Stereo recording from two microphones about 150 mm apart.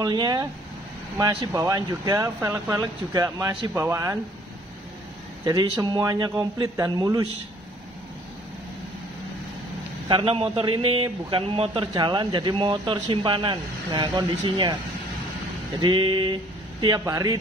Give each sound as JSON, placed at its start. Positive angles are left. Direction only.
{"t": 0.0, "sound": "speech", "side_deg": -30}
{"t": 1.5, "sound": "speech", "side_deg": -20}
{"t": 5.4, "sound": "speech", "side_deg": -25}
{"t": 10.0, "sound": "a man's voice", "side_deg": -35}
{"t": 15.8, "sound": "a man's voice", "side_deg": -30}